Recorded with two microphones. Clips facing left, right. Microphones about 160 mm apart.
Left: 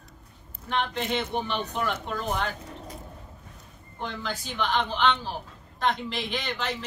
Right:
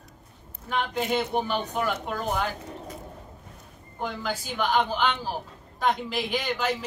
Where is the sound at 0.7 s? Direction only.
5° right (ahead or behind).